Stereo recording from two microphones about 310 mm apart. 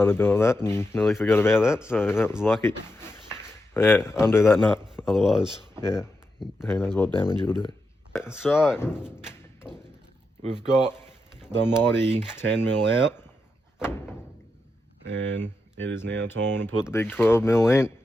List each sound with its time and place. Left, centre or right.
0.0 s speech: centre
3.8 s speech: centre
8.1 s speech: centre
9.0 s thump: centre
11.6 s speech: centre
15.2 s speech: centre
16.0 s speech: right
16.3 s speech: centre